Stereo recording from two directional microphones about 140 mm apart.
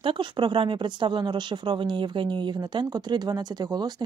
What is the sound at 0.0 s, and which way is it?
Speech, 35° right (ahead or behind).